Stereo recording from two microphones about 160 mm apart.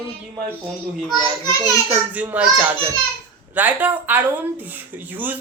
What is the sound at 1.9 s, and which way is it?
Speech, 10° right (ahead or behind).